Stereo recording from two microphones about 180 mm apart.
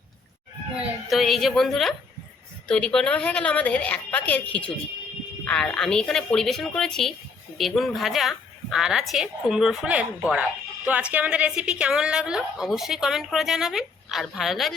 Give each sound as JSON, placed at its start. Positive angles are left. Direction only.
{"t": 1.1, "sound": "a woman's voice", "side_deg": 0}